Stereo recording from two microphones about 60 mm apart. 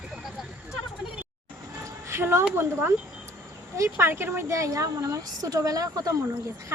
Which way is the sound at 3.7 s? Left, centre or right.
Right.